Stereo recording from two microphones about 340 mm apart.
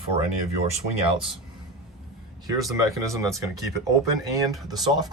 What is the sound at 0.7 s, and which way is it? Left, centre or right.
Speech, centre.